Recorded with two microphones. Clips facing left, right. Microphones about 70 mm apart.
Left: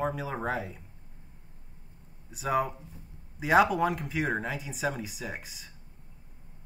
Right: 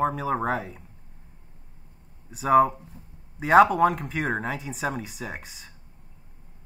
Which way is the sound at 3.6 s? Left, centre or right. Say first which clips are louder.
Right 8 dB; right.